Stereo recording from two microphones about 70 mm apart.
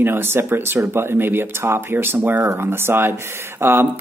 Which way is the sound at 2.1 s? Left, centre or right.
Right.